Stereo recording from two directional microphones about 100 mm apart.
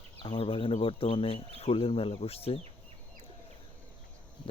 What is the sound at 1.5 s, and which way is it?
Speech, 80° left.